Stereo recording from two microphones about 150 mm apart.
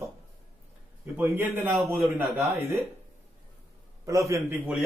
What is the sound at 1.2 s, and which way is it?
Speech, 15° right (ahead or behind).